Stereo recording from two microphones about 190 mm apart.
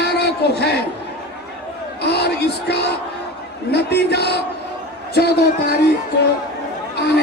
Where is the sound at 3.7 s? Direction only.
60° left (ahead or behind).